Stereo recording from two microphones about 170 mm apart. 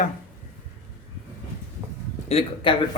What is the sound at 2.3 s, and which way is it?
Speech, 35° left (ahead or behind).